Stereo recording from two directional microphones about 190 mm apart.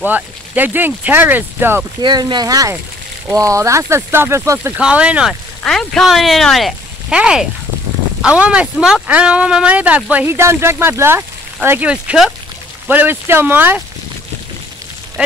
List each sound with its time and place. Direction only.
0.0 s speech: 10° right (ahead or behind)
2.0 s speech: 25° right (ahead or behind)
15.2 s speech: 5° right (ahead or behind)